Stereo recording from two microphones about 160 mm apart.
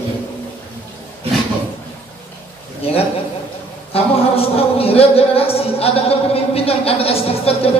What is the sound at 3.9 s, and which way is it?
Speech, 40° left (ahead or behind).